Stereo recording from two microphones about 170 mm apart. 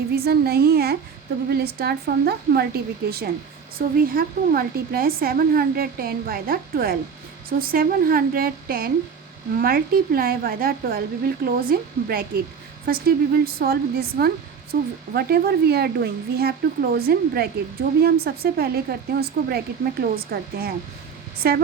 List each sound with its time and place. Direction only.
0.3 s speech: 65° right (ahead or behind)